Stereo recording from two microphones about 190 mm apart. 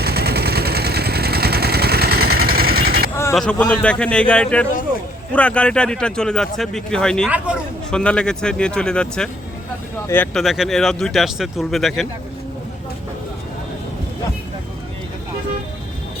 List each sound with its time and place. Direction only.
0.0 s vehicle: 55° right (ahead or behind)
3.7 s speech: 5° left (ahead or behind)
7.3 s speech: 5° right (ahead or behind); by 10.4 s 10° left (ahead or behind)
10.4 s speech: centre (ahead or behind)